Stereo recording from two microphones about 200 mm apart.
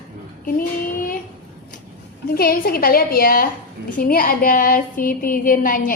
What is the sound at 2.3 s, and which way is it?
A woman's voice, 50° left (ahead or behind).